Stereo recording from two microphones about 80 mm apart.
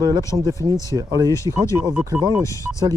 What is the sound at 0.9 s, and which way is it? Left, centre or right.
Speech, right.